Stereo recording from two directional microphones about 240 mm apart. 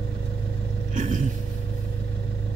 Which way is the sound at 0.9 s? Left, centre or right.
Right.